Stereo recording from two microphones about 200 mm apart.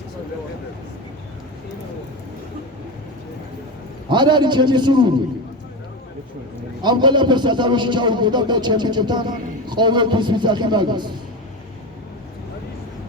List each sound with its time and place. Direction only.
4.1 s a man's voice: 20° right (ahead or behind)
6.8 s a man's voice: 20° right (ahead or behind)